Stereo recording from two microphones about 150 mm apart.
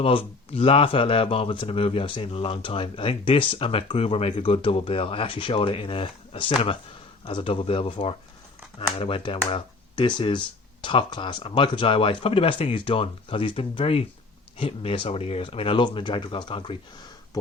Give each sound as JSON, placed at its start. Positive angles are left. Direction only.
{"t": 0.0, "sound": "speech", "side_deg": 35}